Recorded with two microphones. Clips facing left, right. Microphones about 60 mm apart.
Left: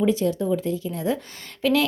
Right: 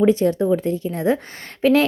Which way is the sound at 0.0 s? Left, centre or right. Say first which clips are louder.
Right 5 dB; right.